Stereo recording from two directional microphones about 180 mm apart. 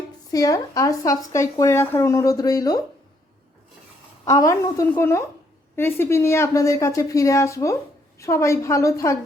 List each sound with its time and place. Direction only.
0.3 s speech: 20° left (ahead or behind)
4.3 s a woman's voice: 20° left (ahead or behind)